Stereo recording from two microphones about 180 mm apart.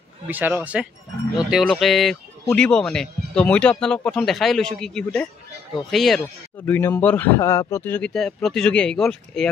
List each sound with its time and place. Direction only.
0.3 s speech: 10° right (ahead or behind)